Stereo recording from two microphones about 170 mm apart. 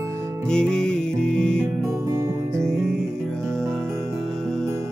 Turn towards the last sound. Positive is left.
turn(degrees=5)  # may be behind; listen again after turning